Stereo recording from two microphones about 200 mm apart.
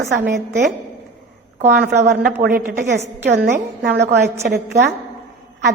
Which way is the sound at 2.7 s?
50° right (ahead or behind).